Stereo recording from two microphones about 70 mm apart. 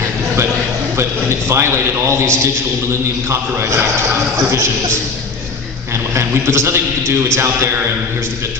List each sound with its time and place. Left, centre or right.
1.5 s a man's voice: right
6.1 s a man's voice: right